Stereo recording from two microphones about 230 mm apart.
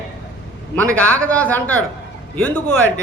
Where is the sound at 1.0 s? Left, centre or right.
Centre.